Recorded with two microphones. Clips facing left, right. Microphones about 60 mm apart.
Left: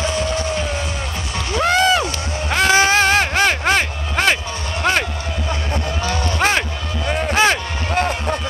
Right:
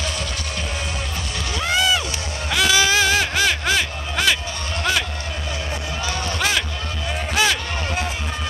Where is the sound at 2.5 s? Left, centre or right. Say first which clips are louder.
Left 4 dB; left.